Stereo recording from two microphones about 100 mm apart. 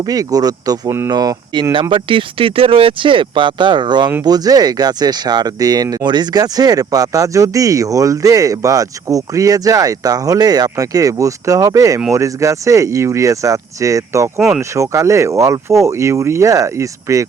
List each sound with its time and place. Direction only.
0.0 s speech: 40° right (ahead or behind)
0.9 s speech: 25° right (ahead or behind)
1.1 s speech: 40° right (ahead or behind)
1.7 s speech: 55° right (ahead or behind); by 17.2 s 35° right (ahead or behind)